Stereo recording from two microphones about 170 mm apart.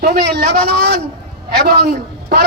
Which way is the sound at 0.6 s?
70° right (ahead or behind).